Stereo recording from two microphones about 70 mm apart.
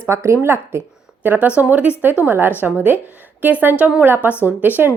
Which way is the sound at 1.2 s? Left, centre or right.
Right.